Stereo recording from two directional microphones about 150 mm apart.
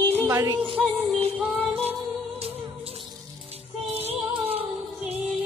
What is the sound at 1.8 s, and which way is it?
Music, 40° right (ahead or behind).